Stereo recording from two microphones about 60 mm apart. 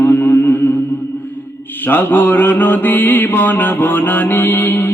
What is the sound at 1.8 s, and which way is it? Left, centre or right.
Mantra, left.